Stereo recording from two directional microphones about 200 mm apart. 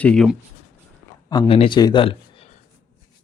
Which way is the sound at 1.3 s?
25° left (ahead or behind).